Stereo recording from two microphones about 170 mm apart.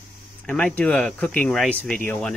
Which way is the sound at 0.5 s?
5° left (ahead or behind).